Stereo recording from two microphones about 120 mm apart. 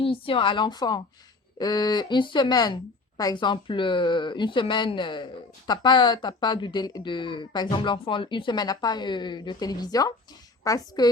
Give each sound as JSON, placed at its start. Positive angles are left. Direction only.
{"t": 0.0, "sound": "a woman's voice", "side_deg": 50}